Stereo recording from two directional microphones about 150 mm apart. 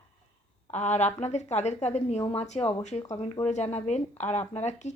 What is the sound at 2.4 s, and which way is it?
A woman's voice, 45° left (ahead or behind).